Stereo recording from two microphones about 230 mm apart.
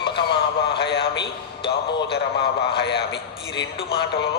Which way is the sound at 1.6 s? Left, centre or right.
Left.